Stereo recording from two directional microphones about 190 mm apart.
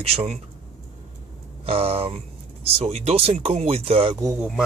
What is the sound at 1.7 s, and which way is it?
Speech, 30° right (ahead or behind).